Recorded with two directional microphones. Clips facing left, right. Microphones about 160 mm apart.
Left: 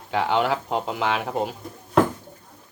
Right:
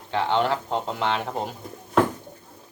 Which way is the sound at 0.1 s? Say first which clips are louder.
Left 1 dB; 10° left (ahead or behind).